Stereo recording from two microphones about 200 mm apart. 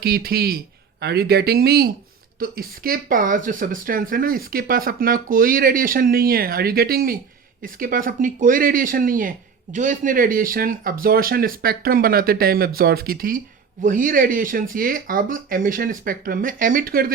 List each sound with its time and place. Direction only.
0.0 s speech: 50° right (ahead or behind)